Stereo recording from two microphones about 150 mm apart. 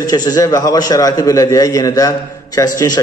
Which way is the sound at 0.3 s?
25° left (ahead or behind).